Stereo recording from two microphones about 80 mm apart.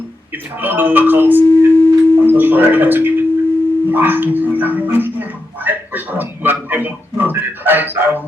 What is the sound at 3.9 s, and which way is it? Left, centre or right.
Dog, right.